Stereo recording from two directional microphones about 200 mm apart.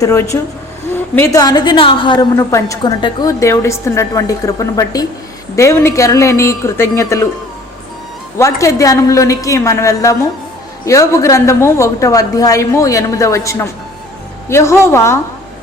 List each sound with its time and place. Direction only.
0.0 s a woman's voice: 15° left (ahead or behind)
8.4 s a woman's voice: 15° left (ahead or behind)